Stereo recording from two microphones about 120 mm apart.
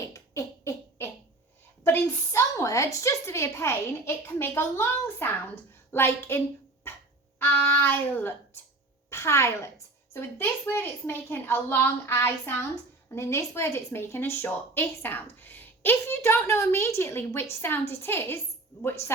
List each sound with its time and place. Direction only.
0.1 s beatboxing: 25° left (ahead or behind)
1.8 s a woman's voice: 20° left (ahead or behind)